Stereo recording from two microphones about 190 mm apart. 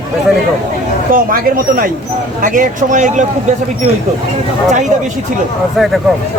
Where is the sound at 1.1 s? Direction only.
50° right (ahead or behind).